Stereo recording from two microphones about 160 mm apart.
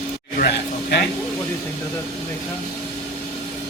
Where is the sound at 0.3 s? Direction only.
75° left (ahead or behind).